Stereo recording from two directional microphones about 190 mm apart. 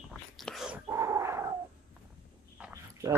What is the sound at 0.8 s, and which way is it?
Dog, 15° right (ahead or behind).